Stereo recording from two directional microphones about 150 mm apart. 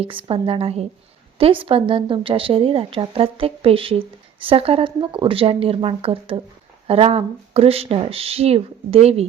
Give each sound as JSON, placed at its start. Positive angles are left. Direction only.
{"t": 0.0, "sound": "speech", "side_deg": -35}